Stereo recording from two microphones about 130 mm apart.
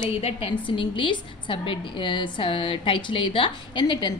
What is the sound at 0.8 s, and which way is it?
A woman's voice, 40° left (ahead or behind).